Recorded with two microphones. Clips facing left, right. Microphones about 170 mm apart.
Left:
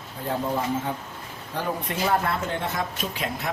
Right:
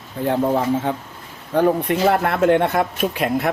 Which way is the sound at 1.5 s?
60° right (ahead or behind).